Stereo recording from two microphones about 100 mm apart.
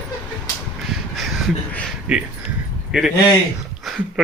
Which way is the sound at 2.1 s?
10° right (ahead or behind).